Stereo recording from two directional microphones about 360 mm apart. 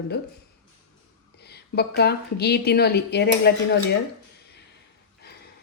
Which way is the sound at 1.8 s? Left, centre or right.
Left.